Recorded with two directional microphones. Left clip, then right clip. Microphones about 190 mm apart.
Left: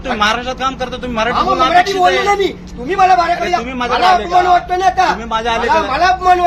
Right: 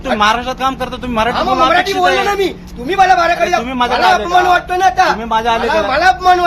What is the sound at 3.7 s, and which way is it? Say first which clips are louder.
Speech: left 1 dB; 20° right (ahead or behind).